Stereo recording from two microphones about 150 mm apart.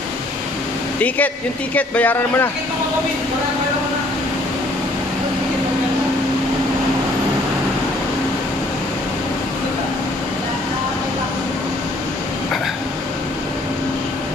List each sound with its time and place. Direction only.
1.0 s speech: 10° left (ahead or behind)